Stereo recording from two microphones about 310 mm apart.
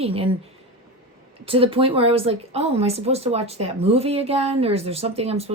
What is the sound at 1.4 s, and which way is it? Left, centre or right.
Speech, centre.